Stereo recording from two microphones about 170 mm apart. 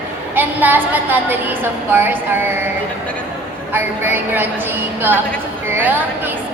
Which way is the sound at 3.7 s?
10° right (ahead or behind).